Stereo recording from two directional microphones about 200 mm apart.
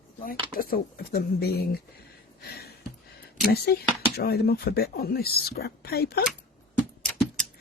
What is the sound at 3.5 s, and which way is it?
Speech, 55° left (ahead or behind).